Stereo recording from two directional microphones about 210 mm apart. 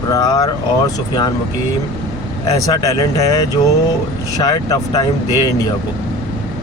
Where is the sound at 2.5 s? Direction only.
15° left (ahead or behind).